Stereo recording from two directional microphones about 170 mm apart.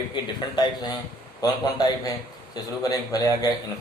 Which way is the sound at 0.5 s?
25° left (ahead or behind).